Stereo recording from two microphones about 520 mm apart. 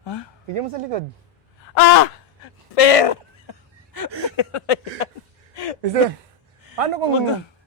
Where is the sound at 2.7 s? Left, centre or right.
Left.